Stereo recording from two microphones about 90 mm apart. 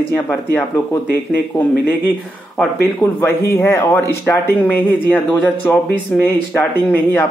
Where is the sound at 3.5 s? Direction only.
25° left (ahead or behind).